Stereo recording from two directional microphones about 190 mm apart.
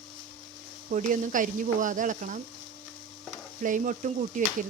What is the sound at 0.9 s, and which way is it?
Speech, 45° right (ahead or behind).